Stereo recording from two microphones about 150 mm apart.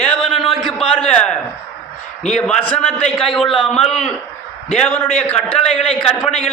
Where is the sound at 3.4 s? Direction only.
35° left (ahead or behind).